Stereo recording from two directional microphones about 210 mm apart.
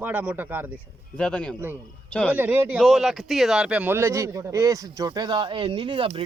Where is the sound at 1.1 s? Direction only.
5° left (ahead or behind).